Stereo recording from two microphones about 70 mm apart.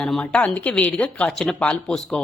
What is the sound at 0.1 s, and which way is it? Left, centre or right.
A woman's voice, centre.